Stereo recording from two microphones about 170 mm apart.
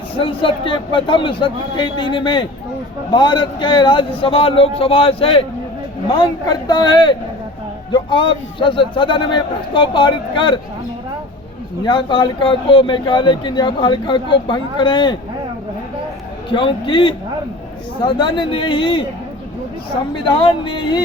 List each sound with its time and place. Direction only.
0.2 s a man's voice: 30° left (ahead or behind)
11.8 s speech: 25° left (ahead or behind)
16.5 s speech: 30° left (ahead or behind)
20.2 s speech: 30° left (ahead or behind)